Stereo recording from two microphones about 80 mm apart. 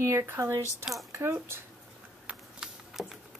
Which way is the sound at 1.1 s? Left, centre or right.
Right.